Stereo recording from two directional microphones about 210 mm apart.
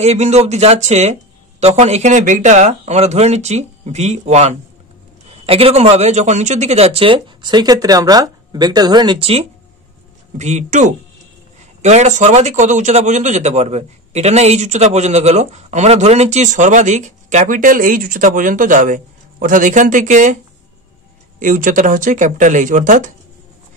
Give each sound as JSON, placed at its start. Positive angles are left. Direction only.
{"t": 0.0, "sound": "a man's voice", "side_deg": -30}
{"t": 21.4, "sound": "a man's voice", "side_deg": -40}